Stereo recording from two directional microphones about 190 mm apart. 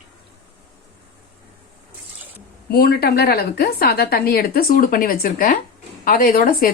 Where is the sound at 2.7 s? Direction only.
55° left (ahead or behind).